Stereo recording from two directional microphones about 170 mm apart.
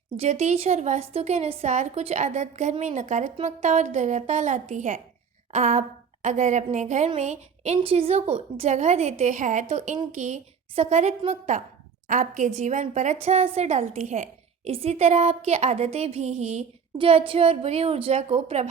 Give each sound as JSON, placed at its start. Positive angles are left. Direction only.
{"t": 0.2, "sound": "a woman's voice", "side_deg": -40}
{"t": 5.5, "sound": "a sound", "side_deg": -45}
{"t": 6.2, "sound": "a woman's voice", "side_deg": -45}